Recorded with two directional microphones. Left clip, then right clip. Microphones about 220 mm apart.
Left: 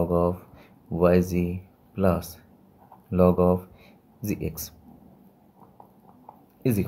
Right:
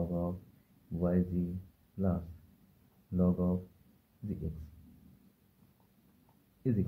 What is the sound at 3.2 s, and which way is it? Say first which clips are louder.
Speech: left 15 dB; 45° left (ahead or behind).